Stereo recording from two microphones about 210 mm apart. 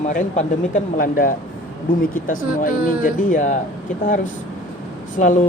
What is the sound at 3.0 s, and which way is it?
Speech, 40° left (ahead or behind).